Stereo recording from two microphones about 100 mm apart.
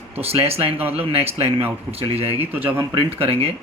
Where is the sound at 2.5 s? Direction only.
20° right (ahead or behind).